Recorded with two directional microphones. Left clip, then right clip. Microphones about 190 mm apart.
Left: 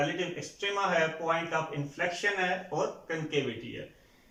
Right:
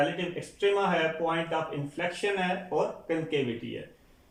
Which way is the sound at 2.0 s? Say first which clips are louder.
Even; 20° right (ahead or behind).